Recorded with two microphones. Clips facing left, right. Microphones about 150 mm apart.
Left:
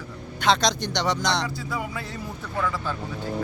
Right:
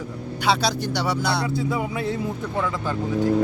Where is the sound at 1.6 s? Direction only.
20° right (ahead or behind).